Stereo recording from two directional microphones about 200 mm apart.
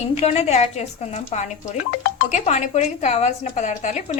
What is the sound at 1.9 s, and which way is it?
Speech, 50° left (ahead or behind).